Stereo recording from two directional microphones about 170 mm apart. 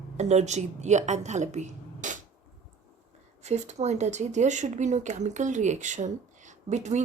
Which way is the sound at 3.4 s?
40° right (ahead or behind).